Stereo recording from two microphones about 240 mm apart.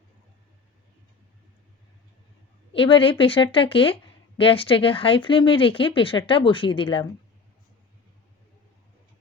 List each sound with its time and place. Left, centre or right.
2.7 s speech: left